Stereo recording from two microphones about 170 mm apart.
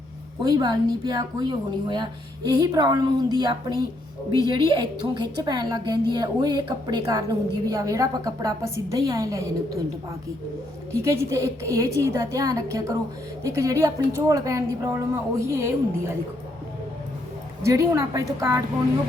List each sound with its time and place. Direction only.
0.4 s a woman's voice: 25° right (ahead or behind)
10.9 s a woman's voice: 15° right (ahead or behind)
17.6 s a woman's voice: 20° right (ahead or behind)